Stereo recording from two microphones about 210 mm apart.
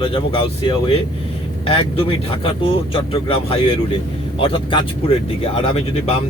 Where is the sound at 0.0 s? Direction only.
25° left (ahead or behind).